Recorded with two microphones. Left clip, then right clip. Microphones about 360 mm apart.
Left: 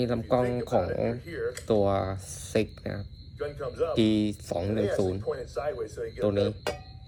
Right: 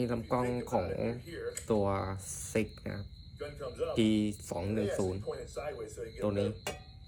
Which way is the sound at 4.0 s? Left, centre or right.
Centre.